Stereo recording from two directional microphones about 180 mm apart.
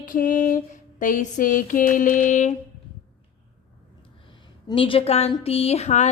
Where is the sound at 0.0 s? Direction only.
50° left (ahead or behind).